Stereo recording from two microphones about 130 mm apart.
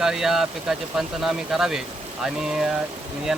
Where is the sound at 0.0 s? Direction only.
5° right (ahead or behind).